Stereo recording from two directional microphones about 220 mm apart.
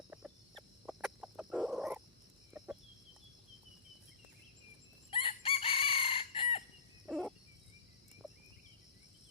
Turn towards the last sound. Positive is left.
turn(degrees=0)  # may be behind; listen again after turning